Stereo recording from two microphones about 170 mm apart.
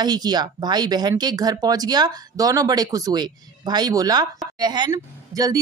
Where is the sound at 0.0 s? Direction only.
25° right (ahead or behind).